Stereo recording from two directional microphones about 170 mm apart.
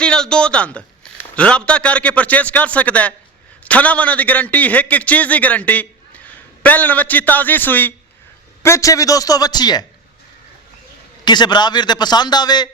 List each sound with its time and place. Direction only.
0.0 s a man's voice: 5° left (ahead or behind); by 9.8 s 25° left (ahead or behind)
11.3 s a man's voice: 25° left (ahead or behind)